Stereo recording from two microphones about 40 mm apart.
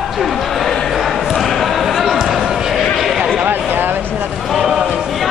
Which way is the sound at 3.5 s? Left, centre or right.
Right.